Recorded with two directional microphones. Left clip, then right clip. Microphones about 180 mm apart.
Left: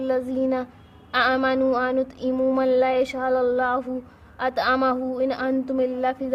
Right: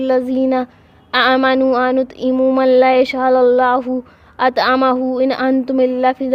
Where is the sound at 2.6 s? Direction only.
45° right (ahead or behind).